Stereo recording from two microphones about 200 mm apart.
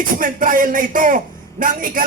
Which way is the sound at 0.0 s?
45° right (ahead or behind).